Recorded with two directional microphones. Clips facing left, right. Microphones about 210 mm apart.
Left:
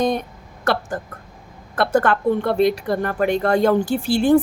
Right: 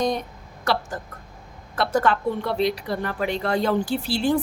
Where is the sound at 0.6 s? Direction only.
55° left (ahead or behind).